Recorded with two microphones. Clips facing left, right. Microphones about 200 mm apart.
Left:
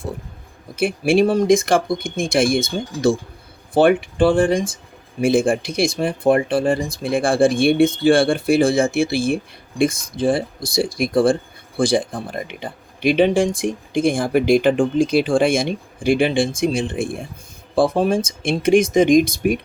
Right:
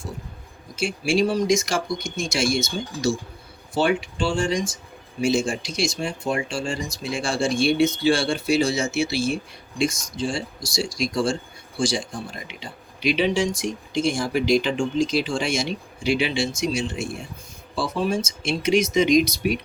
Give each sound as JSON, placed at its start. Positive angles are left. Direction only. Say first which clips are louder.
{"t": 0.8, "sound": "speech", "louder": "left 6 dB", "side_deg": 55}